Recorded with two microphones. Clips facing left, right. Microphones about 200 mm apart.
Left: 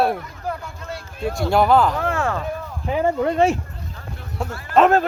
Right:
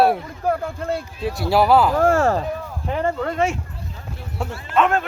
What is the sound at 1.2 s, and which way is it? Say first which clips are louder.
Speech: even; 5° right (ahead or behind).